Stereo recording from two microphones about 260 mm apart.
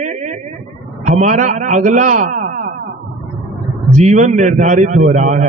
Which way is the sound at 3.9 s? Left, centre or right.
Right.